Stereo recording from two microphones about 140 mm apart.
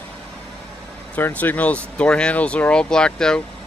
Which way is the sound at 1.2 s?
10° left (ahead or behind).